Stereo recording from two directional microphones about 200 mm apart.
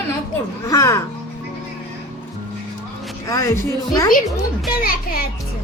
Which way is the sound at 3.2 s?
15° left (ahead or behind).